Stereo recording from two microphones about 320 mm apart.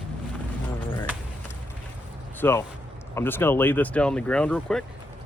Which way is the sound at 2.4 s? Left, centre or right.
Centre.